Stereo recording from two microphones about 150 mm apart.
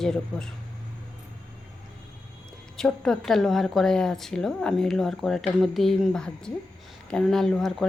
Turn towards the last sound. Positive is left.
turn(degrees=0)  # may be behind; listen again after turning